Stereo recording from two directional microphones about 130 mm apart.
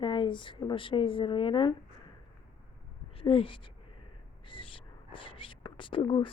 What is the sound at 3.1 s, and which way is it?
Speech, 45° left (ahead or behind).